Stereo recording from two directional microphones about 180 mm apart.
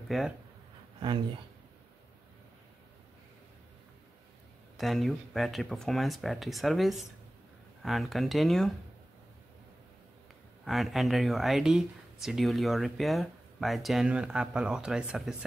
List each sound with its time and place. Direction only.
0.1 s speech: centre (ahead or behind)
0.9 s speech: 25° right (ahead or behind)
4.7 s speech: centre (ahead or behind)
10.6 s speech: centre (ahead or behind)